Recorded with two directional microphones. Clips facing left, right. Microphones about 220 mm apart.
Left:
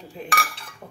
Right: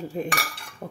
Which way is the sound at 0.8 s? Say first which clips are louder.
Right 7 dB; 55° right (ahead or behind).